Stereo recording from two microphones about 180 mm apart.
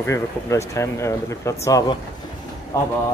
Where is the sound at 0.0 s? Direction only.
15° left (ahead or behind).